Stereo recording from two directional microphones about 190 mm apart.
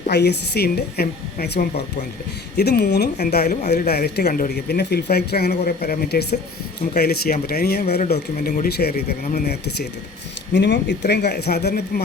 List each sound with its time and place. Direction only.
0.1 s speech: 60° left (ahead or behind)